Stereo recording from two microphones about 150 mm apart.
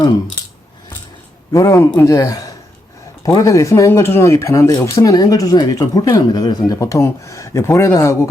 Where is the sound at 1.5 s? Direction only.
20° left (ahead or behind).